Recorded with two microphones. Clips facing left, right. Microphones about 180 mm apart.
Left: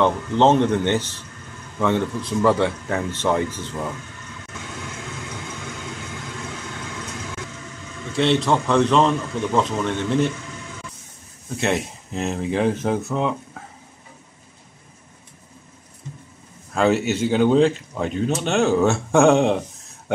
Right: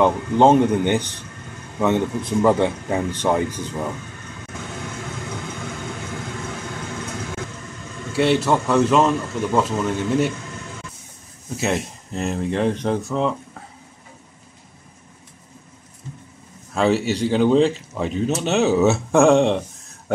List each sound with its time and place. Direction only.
0.0 s a man's voice: 10° right (ahead or behind)
8.1 s a man's voice: 5° right (ahead or behind)
11.5 s speech: centre (ahead or behind)
16.7 s speech: centre (ahead or behind)